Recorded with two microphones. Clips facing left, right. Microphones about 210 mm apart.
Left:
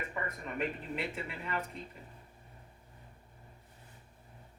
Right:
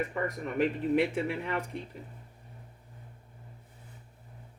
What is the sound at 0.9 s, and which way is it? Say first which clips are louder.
Speech: right 11 dB; 75° right (ahead or behind).